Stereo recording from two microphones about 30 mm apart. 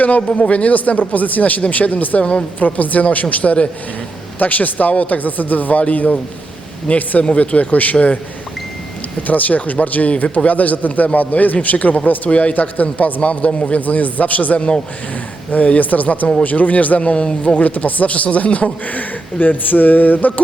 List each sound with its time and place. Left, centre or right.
0.5 s speech: left
4.4 s speech: left
6.9 s speech: left
7.9 s a man's voice: left
9.2 s speech: left
12.3 s speech: left
12.5 s speech: left
13.2 s speech: left
13.8 s speech: left
17.0 s speech: left
17.7 s speech: left